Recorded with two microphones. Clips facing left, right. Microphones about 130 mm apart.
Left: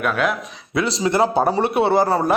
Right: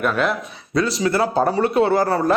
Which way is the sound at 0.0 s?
Centre (ahead or behind).